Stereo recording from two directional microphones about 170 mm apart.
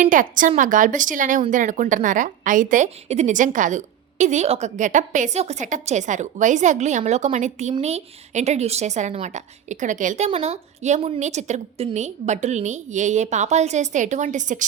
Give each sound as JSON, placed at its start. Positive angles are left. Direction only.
{"t": 0.0, "sound": "speech", "side_deg": -50}